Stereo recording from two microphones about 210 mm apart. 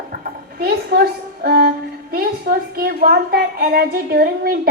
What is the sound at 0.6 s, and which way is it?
A woman's voice, 50° right (ahead or behind).